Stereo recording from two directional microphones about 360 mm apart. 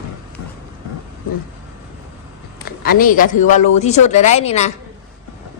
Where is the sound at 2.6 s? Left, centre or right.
Left.